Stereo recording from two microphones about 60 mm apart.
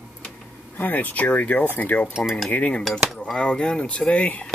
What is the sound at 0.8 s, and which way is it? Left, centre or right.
Speech, left.